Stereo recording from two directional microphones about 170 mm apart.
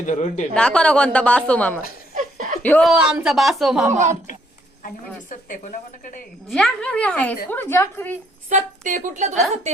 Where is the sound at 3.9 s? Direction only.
45° right (ahead or behind).